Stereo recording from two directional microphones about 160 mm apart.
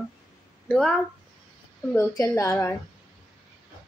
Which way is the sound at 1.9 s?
20° left (ahead or behind).